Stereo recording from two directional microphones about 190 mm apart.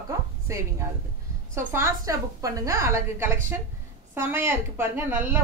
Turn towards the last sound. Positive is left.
turn(degrees=-10)  # may be behind; listen again after turning